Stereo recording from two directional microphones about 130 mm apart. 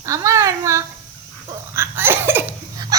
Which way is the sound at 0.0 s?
25° right (ahead or behind).